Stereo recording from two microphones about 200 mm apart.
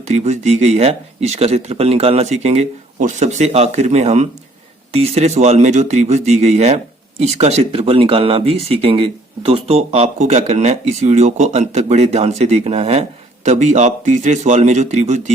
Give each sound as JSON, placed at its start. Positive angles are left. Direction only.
{"t": 0.0, "sound": "speech", "side_deg": -35}